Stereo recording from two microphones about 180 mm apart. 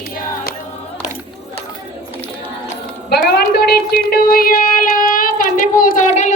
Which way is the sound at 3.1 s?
60° left (ahead or behind).